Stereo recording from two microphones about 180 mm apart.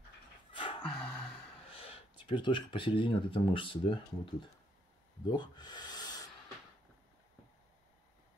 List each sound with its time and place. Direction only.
0.5 s music: 30° left (ahead or behind)
0.8 s music: 10° left (ahead or behind)
1.7 s speech: 30° left (ahead or behind)
5.3 s a sound: 25° left (ahead or behind)